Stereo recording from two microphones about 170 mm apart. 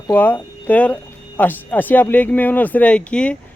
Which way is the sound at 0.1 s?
10° left (ahead or behind).